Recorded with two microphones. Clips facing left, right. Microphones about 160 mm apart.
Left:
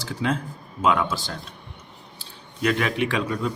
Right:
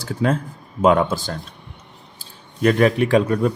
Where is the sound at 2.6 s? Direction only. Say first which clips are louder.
Right 7 dB; 40° right (ahead or behind).